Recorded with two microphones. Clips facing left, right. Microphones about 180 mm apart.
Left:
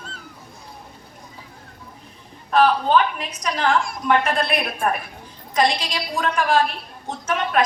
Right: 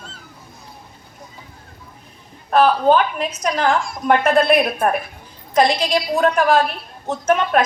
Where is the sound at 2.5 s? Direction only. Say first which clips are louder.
Right 3 dB; 50° right (ahead or behind).